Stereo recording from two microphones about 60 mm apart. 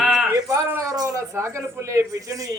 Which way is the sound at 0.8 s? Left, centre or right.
Right.